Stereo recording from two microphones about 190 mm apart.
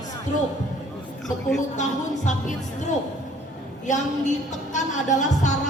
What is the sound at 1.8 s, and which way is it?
Speech, 40° left (ahead or behind).